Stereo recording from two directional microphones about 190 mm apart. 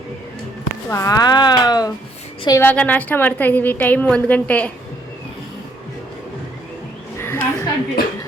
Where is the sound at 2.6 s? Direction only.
10° left (ahead or behind).